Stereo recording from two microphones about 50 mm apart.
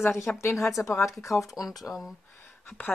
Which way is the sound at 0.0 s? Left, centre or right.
Left.